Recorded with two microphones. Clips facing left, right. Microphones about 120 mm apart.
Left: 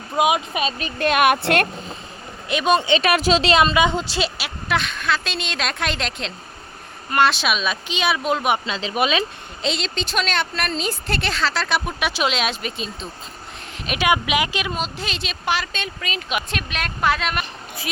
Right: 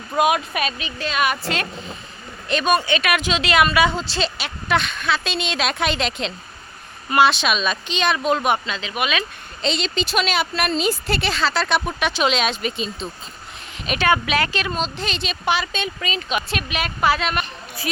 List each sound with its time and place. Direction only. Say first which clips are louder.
0.2 s speech: even; 15° left (ahead or behind)
0.8 s speech: left 5 dB; 50° left (ahead or behind)
2.6 s speech: left 2 dB; 25° left (ahead or behind); by 8.6 s 5° left (ahead or behind)
8.6 s speech: left 3 dB; 30° left (ahead or behind)
9.6 s speech: right 2 dB; centre (ahead or behind)